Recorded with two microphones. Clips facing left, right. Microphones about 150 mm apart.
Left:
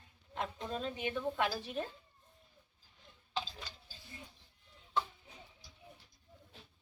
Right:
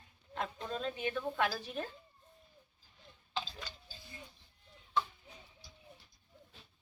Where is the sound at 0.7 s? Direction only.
15° left (ahead or behind).